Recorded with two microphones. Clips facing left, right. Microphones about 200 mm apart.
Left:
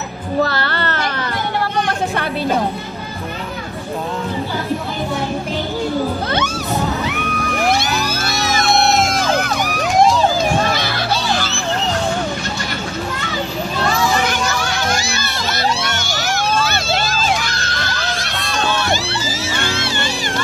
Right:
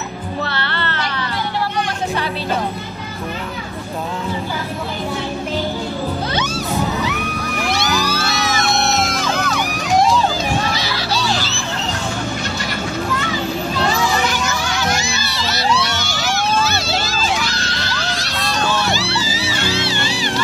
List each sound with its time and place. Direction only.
0.4 s music: 40° left (ahead or behind)
7.7 s music: 50° left (ahead or behind)
10.7 s music: 55° left (ahead or behind)
15.1 s music: 50° left (ahead or behind)